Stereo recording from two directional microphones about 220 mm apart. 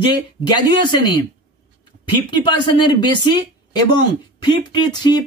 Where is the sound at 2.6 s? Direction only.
20° left (ahead or behind).